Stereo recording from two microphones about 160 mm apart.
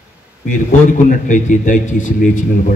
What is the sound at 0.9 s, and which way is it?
A man's voice, 55° left (ahead or behind).